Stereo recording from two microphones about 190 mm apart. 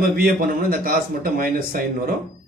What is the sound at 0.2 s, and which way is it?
Speech, 50° right (ahead or behind).